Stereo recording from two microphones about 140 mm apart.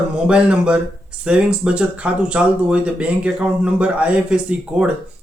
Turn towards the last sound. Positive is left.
turn(degrees=-10)  # may be behind; listen again after turning